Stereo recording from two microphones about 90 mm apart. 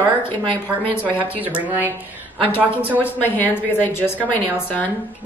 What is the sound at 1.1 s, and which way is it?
Speech, 20° right (ahead or behind).